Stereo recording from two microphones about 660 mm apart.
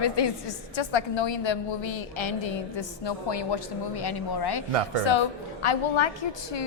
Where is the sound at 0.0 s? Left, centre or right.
Left.